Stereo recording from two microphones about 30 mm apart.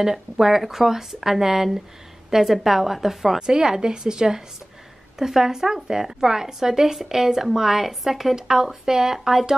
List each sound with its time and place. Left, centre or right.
0.0 s speech: centre
3.3 s speech: right